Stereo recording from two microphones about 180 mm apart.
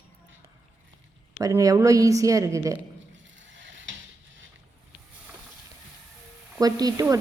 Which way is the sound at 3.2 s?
90° right.